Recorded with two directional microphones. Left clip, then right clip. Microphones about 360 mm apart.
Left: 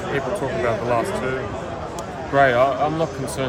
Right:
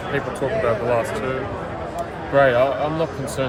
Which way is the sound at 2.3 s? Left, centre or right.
Centre.